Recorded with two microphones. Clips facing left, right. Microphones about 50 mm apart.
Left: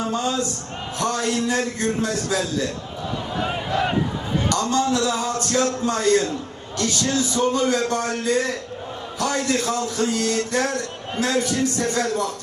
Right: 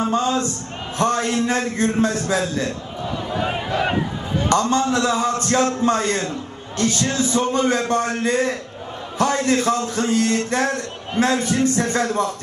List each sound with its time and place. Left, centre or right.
0.0 s a man's voice: right
3.3 s speech: centre
4.4 s a man's voice: right